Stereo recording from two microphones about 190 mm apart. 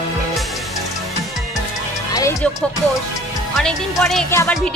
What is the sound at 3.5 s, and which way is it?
Speech, centre (ahead or behind).